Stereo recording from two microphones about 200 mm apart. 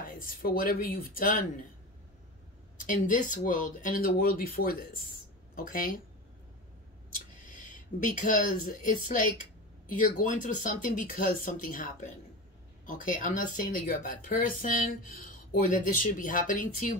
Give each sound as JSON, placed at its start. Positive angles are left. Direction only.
{"t": 0.0, "sound": "speech", "side_deg": 45}
{"t": 2.8, "sound": "speech", "side_deg": 40}
{"t": 7.4, "sound": "speech", "side_deg": 40}
{"t": 9.9, "sound": "speech", "side_deg": 40}